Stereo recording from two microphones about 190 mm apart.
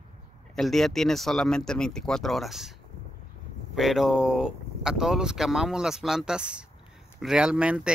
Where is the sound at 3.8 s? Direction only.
Centre (ahead or behind).